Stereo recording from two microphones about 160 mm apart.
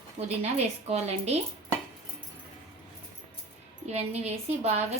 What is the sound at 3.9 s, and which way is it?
Speech, 40° right (ahead or behind).